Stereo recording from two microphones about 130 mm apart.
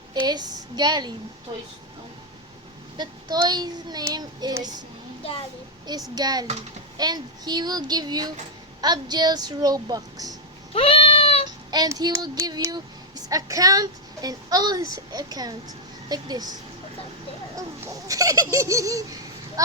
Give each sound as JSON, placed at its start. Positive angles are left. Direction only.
{"t": 0.1, "sound": "speech", "side_deg": -30}
{"t": 3.0, "sound": "speech", "side_deg": -35}
{"t": 6.1, "sound": "speech", "side_deg": -30}
{"t": 10.8, "sound": "cat", "side_deg": 45}
{"t": 11.4, "sound": "child singing", "side_deg": -30}
{"t": 16.0, "sound": "speech", "side_deg": -30}
{"t": 18.1, "sound": "speech", "side_deg": -25}